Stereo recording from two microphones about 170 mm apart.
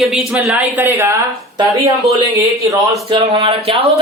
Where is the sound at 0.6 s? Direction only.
10° right (ahead or behind).